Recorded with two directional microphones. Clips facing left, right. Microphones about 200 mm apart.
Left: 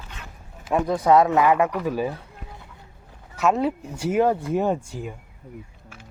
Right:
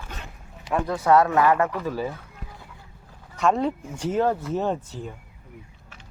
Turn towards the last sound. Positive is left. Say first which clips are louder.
# left 3 dB
turn(degrees=10)  # may be behind; listen again after turning